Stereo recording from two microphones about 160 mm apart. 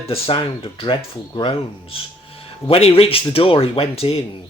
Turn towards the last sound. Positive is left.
turn(degrees=40)  # may be behind; listen again after turning